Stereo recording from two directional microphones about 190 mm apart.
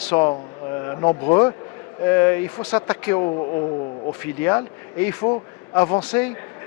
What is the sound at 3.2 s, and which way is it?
Speech, 30° left (ahead or behind).